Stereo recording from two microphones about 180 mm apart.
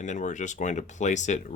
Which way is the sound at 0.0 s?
45° left (ahead or behind).